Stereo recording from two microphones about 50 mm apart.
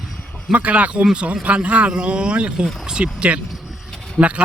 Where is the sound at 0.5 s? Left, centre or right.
Right.